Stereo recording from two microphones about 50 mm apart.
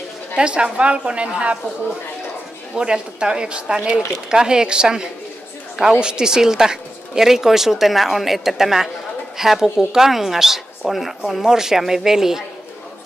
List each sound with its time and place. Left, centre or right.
0.4 s a woman's voice: centre
2.7 s speech: centre